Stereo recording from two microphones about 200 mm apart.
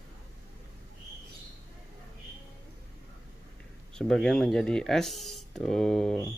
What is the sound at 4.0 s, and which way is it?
Speech, centre (ahead or behind).